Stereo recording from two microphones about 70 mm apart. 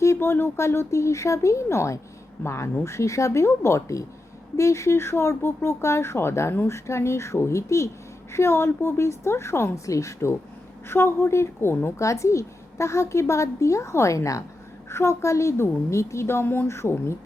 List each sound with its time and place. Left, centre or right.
0.0 s a woman's voice: left